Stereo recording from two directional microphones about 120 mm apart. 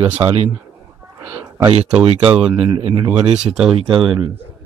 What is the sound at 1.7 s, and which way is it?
Speech, 60° right (ahead or behind).